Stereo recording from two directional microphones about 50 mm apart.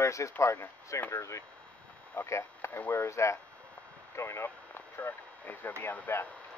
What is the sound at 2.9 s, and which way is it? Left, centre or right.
Speech, left.